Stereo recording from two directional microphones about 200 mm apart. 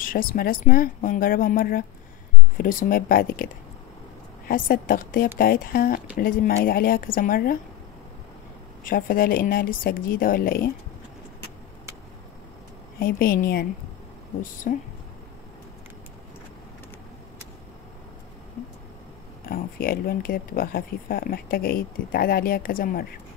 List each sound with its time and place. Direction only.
0.0 s speech: 45° left (ahead or behind)
4.5 s speech: 45° left (ahead or behind)
8.8 s speech: 45° left (ahead or behind)
13.0 s speech: 45° left (ahead or behind)
19.4 s speech: 45° left (ahead or behind)